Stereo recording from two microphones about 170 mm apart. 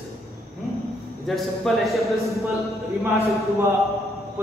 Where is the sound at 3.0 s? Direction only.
15° right (ahead or behind).